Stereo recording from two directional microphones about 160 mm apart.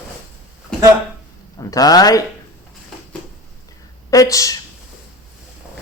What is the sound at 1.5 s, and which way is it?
Speech, 25° left (ahead or behind).